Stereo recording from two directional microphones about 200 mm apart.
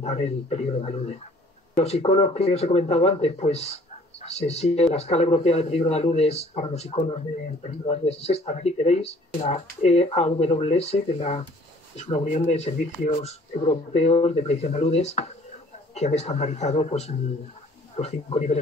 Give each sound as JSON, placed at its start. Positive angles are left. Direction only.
{"t": 0.0, "sound": "speech", "side_deg": 35}